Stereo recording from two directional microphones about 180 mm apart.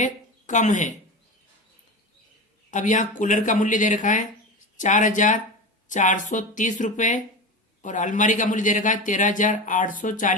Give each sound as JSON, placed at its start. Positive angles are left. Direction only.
{"t": 0.0, "sound": "speech", "side_deg": 45}
{"t": 2.6, "sound": "speech", "side_deg": 45}